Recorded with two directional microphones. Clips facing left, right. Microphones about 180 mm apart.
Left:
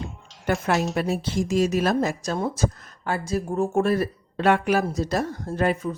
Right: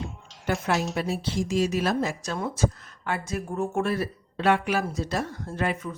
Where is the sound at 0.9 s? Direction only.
50° left (ahead or behind).